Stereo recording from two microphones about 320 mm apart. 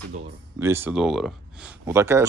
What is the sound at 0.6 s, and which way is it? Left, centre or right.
Speech, centre.